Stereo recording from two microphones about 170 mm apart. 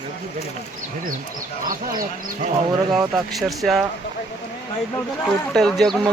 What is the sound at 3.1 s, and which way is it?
Speech, centre (ahead or behind).